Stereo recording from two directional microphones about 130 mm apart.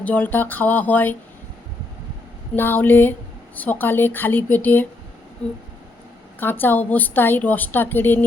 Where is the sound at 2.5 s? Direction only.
15° left (ahead or behind).